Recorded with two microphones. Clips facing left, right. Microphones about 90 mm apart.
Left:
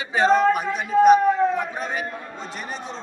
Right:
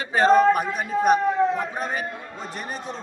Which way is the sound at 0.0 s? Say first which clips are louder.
Right 1 dB; 45° right (ahead or behind).